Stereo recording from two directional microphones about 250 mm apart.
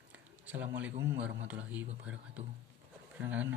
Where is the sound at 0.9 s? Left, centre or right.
Right.